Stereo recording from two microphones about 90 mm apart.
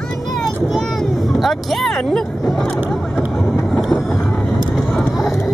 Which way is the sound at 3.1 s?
5° left (ahead or behind).